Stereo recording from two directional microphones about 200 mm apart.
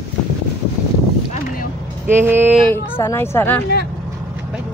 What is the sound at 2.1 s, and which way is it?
Speech, 10° right (ahead or behind).